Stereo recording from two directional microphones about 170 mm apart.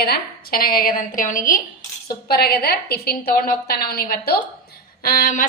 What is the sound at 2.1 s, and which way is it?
A woman's voice, 65° left (ahead or behind).